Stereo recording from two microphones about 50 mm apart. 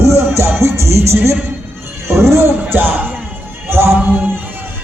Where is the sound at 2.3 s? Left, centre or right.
Right.